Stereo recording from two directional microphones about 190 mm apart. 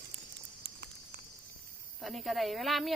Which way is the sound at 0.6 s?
60° right (ahead or behind).